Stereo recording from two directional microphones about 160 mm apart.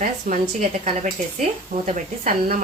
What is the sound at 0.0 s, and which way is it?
Speech, 55° right (ahead or behind).